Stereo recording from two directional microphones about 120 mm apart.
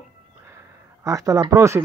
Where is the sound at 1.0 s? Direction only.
30° right (ahead or behind).